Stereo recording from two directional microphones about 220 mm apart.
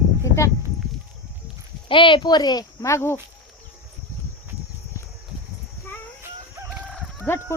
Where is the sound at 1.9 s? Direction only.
20° left (ahead or behind).